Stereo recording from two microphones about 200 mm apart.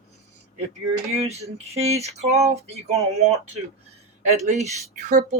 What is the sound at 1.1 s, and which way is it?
Speech, 30° right (ahead or behind).